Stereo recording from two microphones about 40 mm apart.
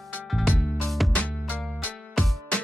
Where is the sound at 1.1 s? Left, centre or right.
Left.